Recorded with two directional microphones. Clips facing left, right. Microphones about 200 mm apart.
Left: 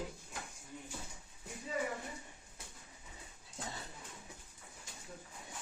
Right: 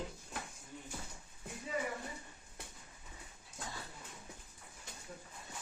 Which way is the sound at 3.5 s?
25° left (ahead or behind).